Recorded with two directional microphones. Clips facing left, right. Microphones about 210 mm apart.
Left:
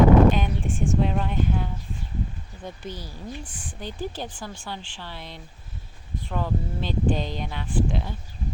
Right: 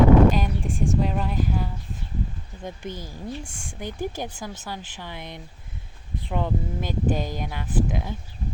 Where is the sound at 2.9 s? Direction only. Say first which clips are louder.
Right 1 dB; 50° right (ahead or behind).